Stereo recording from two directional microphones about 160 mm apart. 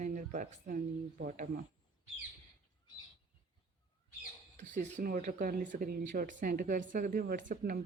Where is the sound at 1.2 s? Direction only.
65° right (ahead or behind).